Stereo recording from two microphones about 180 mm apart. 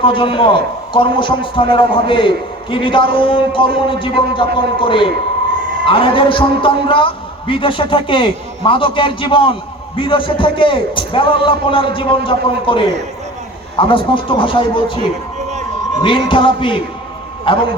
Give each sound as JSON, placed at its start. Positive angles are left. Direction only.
{"t": 0.0, "sound": "a man's voice", "side_deg": 30}
{"t": 15.4, "sound": "a sound", "side_deg": -40}
{"t": 16.0, "sound": "a man's voice", "side_deg": 25}